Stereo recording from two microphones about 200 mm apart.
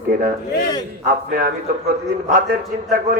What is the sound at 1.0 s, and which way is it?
A man's voice, 45° right (ahead or behind).